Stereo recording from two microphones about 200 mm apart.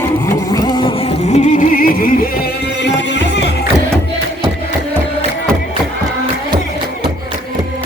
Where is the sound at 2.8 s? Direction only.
60° left (ahead or behind).